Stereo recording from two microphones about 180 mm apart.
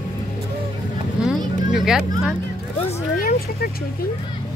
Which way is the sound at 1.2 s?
5° right (ahead or behind).